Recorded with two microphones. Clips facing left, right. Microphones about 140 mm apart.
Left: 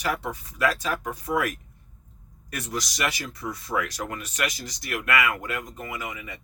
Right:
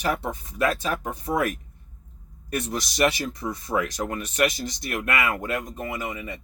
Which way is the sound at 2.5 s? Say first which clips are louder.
Right 4 dB; 25° right (ahead or behind).